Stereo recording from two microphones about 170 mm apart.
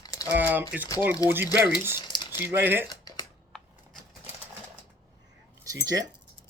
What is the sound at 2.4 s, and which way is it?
Speech, 10° right (ahead or behind).